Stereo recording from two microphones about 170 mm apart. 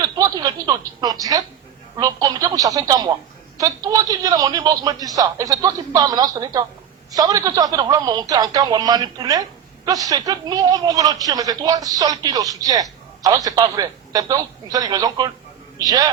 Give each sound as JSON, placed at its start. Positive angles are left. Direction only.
{"t": 0.2, "sound": "speech", "side_deg": -20}